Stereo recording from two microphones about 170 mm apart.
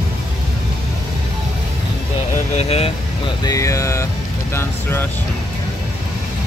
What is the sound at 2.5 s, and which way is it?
Speech, 35° left (ahead or behind).